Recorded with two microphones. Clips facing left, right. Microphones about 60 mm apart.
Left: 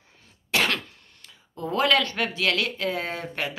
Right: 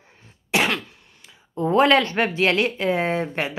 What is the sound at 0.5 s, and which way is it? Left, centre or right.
Throat clearing, centre.